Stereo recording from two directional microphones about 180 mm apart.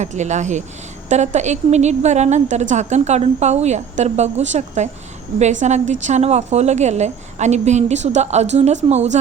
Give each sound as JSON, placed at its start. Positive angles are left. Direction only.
{"t": 0.0, "sound": "a woman's voice", "side_deg": -40}